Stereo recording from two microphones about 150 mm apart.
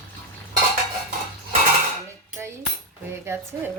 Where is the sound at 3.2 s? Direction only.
15° right (ahead or behind).